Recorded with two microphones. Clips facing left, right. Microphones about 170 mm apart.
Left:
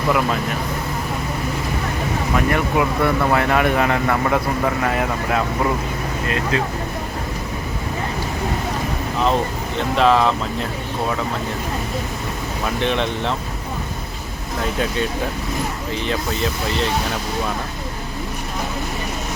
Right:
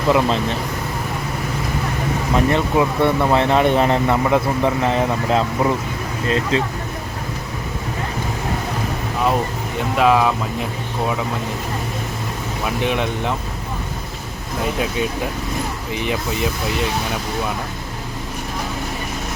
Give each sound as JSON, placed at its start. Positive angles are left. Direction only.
{"t": 0.1, "sound": "speech", "side_deg": -25}
{"t": 2.3, "sound": "speech", "side_deg": -25}
{"t": 9.9, "sound": "speech", "side_deg": -10}
{"t": 12.6, "sound": "speech", "side_deg": -10}
{"t": 15.9, "sound": "speech", "side_deg": -15}